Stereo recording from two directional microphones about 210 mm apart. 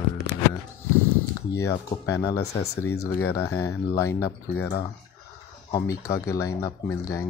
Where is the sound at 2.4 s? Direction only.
30° left (ahead or behind).